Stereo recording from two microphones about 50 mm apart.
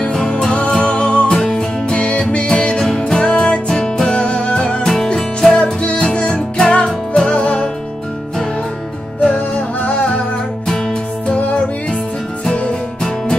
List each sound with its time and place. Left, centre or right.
0.0 s music: centre
9.8 s music: left